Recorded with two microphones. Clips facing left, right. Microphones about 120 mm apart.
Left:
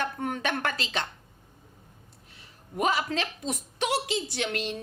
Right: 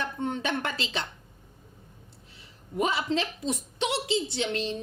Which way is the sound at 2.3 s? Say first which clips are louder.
Right 3 dB; 25° right (ahead or behind).